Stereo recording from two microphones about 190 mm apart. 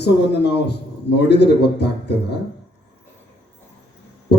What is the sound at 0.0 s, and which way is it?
A man's voice, 60° left (ahead or behind).